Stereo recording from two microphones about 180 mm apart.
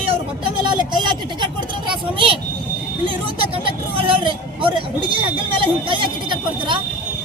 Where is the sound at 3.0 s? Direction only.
30° right (ahead or behind).